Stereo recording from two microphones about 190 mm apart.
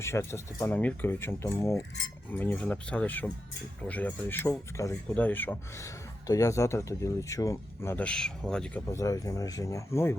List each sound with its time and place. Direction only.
0.0 s speech: 15° left (ahead or behind)
8.9 s speech: 15° left (ahead or behind)